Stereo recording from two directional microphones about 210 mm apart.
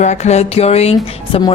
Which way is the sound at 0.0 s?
35° left (ahead or behind).